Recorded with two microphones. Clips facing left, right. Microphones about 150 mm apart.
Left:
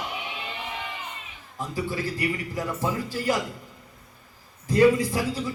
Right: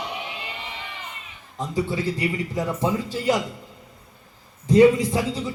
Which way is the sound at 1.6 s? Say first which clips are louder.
Right 4 dB; 20° right (ahead or behind).